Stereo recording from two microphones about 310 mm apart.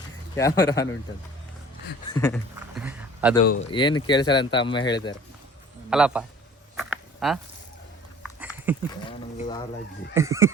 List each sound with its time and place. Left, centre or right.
0.3 s speech: centre
2.0 s a sound: centre
2.6 s a sound: centre
3.4 s speech: left
3.7 s speech: centre
5.9 s a man's voice: centre
6.7 s a sound: centre
8.2 s dog: centre
8.9 s speech: centre
10.2 s speech: centre